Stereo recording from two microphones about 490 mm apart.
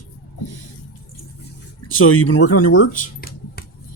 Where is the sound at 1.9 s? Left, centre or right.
Left.